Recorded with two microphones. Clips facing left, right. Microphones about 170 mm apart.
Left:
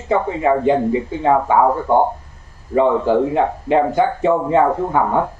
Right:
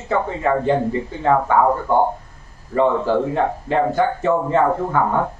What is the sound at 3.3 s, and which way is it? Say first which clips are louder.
Speech: left 3 dB; 15° left (ahead or behind).